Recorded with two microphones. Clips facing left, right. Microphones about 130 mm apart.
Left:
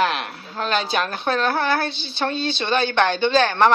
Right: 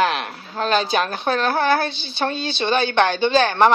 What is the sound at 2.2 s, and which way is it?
Speech, 15° right (ahead or behind).